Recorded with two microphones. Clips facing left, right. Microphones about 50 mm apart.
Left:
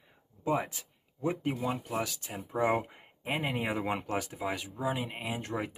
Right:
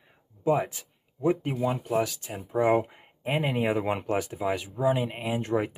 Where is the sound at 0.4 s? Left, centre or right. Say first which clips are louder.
Right 6 dB; centre.